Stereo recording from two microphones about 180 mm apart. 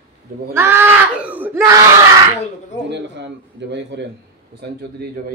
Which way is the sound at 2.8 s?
75° right (ahead or behind).